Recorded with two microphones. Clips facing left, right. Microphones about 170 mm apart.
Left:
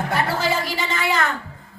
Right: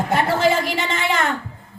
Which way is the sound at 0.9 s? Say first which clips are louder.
Left 1 dB; 25° right (ahead or behind).